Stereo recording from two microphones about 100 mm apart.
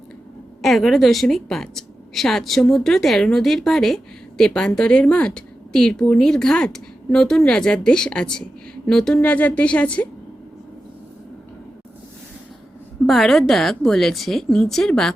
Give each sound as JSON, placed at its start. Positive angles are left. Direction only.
{"t": 0.6, "sound": "a woman's voice", "side_deg": 0}
{"t": 9.1, "sound": "a woman's voice", "side_deg": 15}
{"t": 13.1, "sound": "a woman's voice", "side_deg": 0}